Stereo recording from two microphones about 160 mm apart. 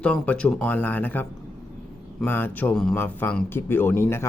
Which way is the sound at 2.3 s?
10° left (ahead or behind).